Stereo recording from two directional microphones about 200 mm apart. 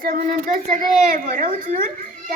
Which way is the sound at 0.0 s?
45° right (ahead or behind).